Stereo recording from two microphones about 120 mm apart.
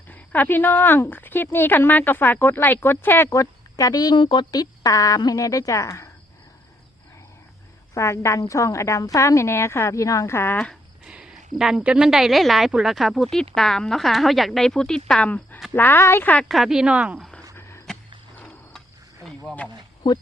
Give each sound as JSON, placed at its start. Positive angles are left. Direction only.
{"t": 0.1, "sound": "speech", "side_deg": 15}
{"t": 7.9, "sound": "speech", "side_deg": 25}
{"t": 11.0, "sound": "a sound", "side_deg": -5}
{"t": 11.5, "sound": "speech", "side_deg": -5}
{"t": 16.5, "sound": "speech", "side_deg": 0}
{"t": 17.6, "sound": "a sound", "side_deg": 20}
{"t": 18.3, "sound": "mechanisms", "side_deg": 5}
{"t": 19.5, "sound": "speech", "side_deg": 10}